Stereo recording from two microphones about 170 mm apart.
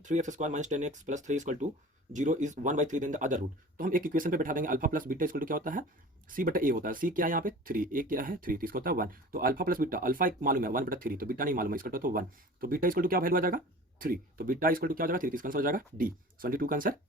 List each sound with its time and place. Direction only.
0.0 s speech: 45° right (ahead or behind)